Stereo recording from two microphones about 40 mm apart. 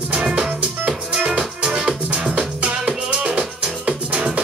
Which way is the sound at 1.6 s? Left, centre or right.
Centre.